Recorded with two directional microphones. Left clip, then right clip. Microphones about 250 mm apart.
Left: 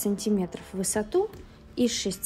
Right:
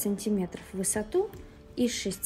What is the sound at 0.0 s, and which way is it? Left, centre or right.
Speech, centre.